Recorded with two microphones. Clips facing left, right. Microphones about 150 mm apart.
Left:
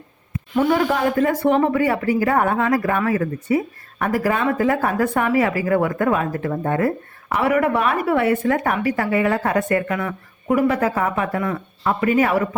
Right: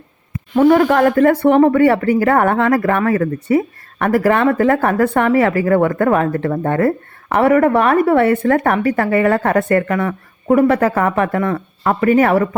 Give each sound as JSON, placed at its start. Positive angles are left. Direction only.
{"t": 0.5, "sound": "speech", "side_deg": -55}